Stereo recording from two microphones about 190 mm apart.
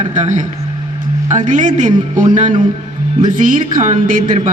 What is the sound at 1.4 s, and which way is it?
A man's voice, 40° right (ahead or behind).